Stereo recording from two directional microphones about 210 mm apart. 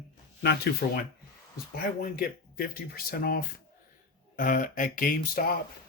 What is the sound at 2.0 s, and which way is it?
Speech, 45° left (ahead or behind).